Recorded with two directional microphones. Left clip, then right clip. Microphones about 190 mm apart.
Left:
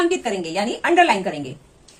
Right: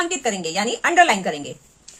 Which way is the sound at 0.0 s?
30° right (ahead or behind).